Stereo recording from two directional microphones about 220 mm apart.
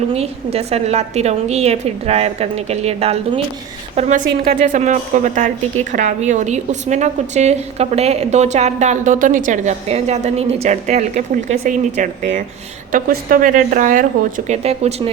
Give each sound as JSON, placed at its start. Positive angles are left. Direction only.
{"t": 0.1, "sound": "a woman's voice", "side_deg": -25}